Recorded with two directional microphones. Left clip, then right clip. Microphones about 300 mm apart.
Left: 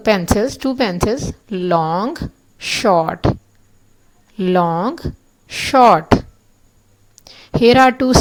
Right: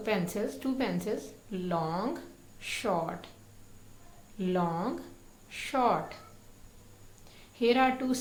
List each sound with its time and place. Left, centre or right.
0.0 s a woman's voice: left
4.4 s a woman's voice: left
7.3 s a woman's voice: left